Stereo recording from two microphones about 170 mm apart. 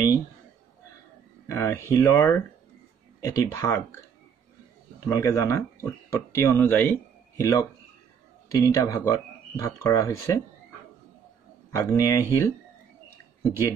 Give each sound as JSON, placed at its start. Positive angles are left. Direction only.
{"t": 1.5, "sound": "speech", "side_deg": 15}
{"t": 5.0, "sound": "speech", "side_deg": 20}
{"t": 11.7, "sound": "speech", "side_deg": 20}